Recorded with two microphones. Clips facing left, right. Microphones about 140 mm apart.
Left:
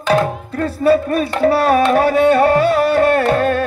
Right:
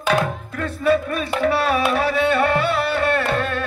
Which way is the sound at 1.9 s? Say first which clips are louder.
Left 7 dB; 45° left (ahead or behind).